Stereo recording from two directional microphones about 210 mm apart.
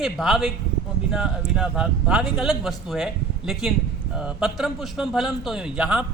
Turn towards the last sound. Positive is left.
turn(degrees=-5)  # may be behind; listen again after turning